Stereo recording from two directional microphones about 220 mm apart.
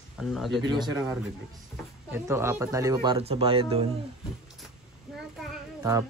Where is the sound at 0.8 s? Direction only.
15° right (ahead or behind).